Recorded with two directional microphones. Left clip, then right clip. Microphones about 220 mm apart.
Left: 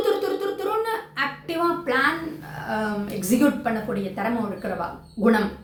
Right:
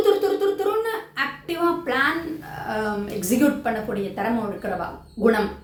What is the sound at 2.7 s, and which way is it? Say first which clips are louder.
Speech: right 1 dB; 5° right (ahead or behind).